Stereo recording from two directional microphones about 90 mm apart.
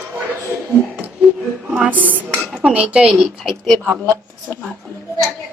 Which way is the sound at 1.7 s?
15° right (ahead or behind).